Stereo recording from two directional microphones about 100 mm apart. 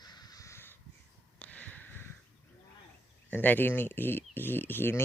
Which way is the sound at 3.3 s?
20° left (ahead or behind).